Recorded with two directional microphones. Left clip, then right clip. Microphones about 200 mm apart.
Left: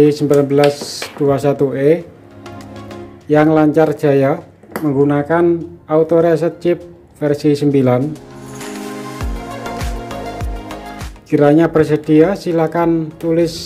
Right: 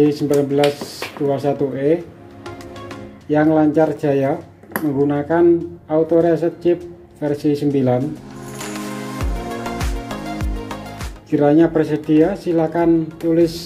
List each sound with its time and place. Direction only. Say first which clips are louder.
0.0 s speech: left 4 dB; 20° left (ahead or behind)
3.3 s speech: left 4 dB; 15° left (ahead or behind)
9.2 s music: even; centre (ahead or behind)
11.2 s speech: left 3 dB; 20° left (ahead or behind)